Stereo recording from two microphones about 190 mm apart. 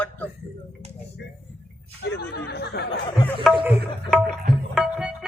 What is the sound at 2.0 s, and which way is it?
Speech, 60° left (ahead or behind).